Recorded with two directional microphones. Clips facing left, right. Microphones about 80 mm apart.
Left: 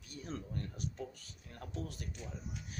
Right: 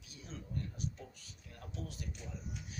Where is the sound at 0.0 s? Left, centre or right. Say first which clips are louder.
Left 6 dB; left.